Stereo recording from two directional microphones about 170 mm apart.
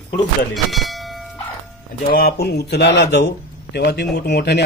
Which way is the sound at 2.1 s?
65° left (ahead or behind).